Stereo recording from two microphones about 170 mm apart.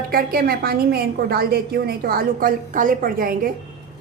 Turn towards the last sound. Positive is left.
turn(degrees=-55)  # may be behind; listen again after turning